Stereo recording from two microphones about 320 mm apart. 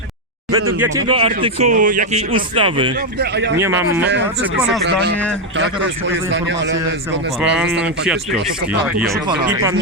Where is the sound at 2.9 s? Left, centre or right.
Right.